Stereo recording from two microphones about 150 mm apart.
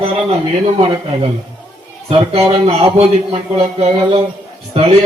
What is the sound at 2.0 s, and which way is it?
A man's voice, 45° right (ahead or behind).